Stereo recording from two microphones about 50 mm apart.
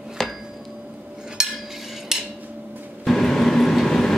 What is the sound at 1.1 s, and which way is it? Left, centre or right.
Cutlery, centre.